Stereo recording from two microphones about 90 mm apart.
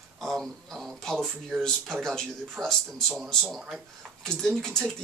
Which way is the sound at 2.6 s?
45° right (ahead or behind).